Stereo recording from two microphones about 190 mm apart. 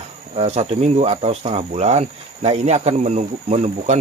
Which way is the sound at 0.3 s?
35° right (ahead or behind).